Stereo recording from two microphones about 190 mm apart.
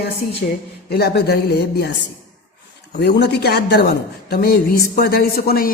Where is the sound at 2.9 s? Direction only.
60° left (ahead or behind).